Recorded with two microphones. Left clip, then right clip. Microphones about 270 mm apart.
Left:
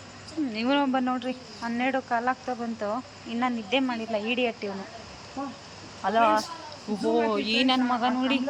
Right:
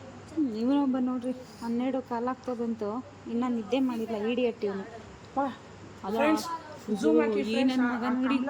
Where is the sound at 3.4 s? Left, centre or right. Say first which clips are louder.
Left 4 dB; centre.